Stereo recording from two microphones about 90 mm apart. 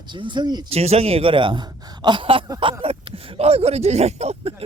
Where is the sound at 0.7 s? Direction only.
90° right; by 2.4 s 70° right (ahead or behind).